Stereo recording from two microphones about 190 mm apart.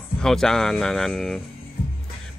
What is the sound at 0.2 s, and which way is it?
Speech, 5° left (ahead or behind).